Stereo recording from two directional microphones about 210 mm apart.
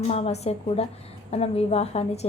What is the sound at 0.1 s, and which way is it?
A woman's voice, 30° left (ahead or behind).